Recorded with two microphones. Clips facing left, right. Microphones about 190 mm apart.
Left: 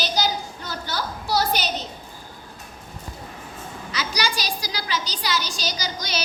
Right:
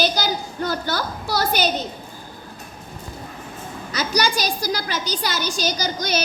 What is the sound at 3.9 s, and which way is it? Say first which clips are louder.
A woman's voice: right 5 dB; 45° right (ahead or behind).